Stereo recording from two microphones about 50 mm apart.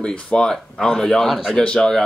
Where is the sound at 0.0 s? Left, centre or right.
Left; by 1.5 s centre.